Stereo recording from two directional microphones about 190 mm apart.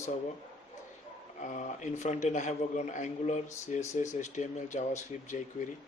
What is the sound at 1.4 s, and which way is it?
A man's voice, 40° left (ahead or behind).